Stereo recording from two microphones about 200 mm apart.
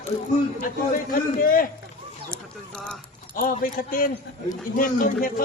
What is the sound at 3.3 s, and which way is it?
Speech, 45° left (ahead or behind).